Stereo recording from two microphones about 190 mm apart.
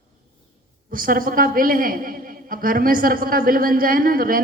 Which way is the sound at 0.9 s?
50° right (ahead or behind).